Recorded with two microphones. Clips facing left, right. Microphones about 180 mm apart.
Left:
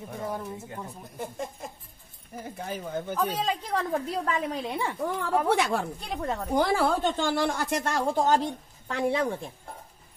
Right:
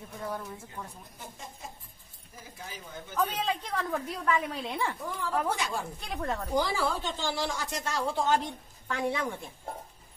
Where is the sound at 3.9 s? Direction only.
35° left (ahead or behind).